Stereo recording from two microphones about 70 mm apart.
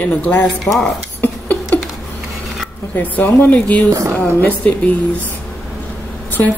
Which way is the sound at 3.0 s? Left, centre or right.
Left.